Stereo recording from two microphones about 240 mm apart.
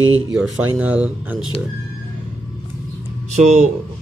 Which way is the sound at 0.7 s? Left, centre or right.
Centre.